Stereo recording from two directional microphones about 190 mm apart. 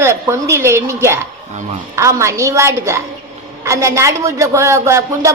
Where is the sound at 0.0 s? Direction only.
15° right (ahead or behind).